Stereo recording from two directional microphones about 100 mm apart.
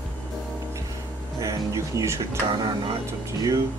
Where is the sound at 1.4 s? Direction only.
35° right (ahead or behind).